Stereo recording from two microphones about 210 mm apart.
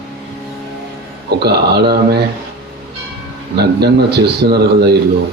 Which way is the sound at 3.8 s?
50° right (ahead or behind).